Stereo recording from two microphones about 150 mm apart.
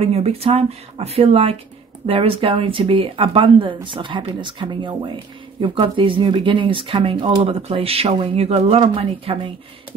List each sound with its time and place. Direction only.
0.0 s speech: 40° right (ahead or behind)